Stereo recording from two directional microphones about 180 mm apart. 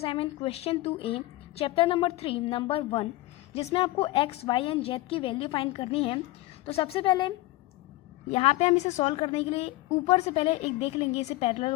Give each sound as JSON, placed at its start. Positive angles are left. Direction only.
{"t": 0.0, "sound": "a woman's voice", "side_deg": 30}